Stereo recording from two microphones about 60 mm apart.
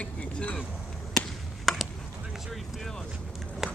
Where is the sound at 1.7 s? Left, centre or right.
Centre.